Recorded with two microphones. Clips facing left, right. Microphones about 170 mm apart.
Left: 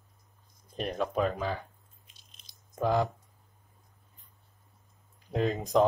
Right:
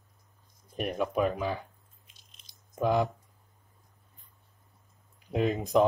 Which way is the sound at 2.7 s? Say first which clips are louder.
Right 1 dB; 20° right (ahead or behind).